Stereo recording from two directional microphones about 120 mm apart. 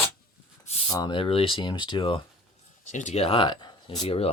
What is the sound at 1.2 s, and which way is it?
Speech, 50° left (ahead or behind).